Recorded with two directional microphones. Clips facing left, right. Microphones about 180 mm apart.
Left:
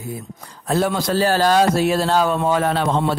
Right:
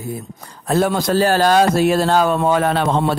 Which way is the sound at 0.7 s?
45° right (ahead or behind).